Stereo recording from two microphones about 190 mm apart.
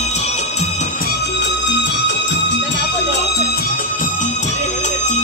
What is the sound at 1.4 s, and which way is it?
Music, 70° left (ahead or behind).